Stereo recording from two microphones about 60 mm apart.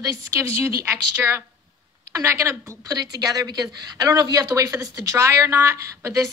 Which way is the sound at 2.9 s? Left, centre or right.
Right.